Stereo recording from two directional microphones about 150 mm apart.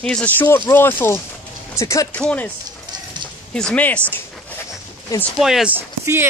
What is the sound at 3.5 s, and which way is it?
Speech, 5° left (ahead or behind).